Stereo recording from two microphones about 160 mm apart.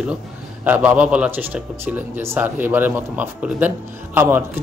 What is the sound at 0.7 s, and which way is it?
A man's voice, 10° right (ahead or behind).